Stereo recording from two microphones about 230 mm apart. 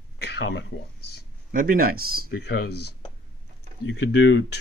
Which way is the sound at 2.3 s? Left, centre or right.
Left.